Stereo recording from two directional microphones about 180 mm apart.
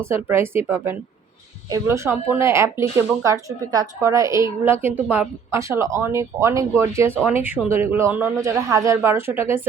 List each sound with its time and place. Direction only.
0.1 s a woman's voice: 15° right (ahead or behind)